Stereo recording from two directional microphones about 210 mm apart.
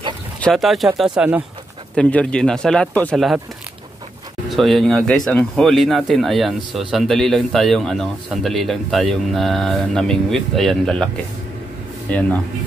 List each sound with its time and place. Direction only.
0.4 s speech: centre (ahead or behind)
4.5 s speech: centre (ahead or behind)
12.1 s speech: 5° left (ahead or behind)